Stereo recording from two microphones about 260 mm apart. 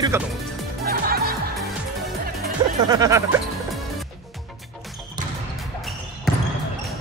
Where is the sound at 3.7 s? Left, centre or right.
Centre.